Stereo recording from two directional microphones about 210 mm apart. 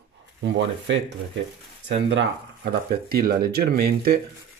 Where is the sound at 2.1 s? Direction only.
55° right (ahead or behind).